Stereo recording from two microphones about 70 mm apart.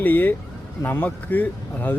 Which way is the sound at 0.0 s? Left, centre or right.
Left.